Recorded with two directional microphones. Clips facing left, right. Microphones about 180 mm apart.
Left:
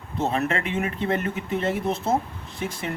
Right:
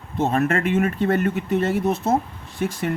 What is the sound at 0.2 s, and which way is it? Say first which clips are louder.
Speech: right 4 dB; 50° right (ahead or behind).